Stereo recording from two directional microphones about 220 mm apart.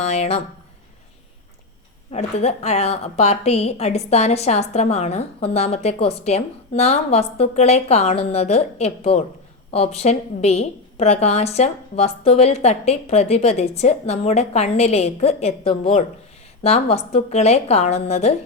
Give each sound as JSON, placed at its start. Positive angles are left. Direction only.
{"t": 0.0, "sound": "a woman's voice", "side_deg": 30}
{"t": 2.1, "sound": "a woman's voice", "side_deg": 30}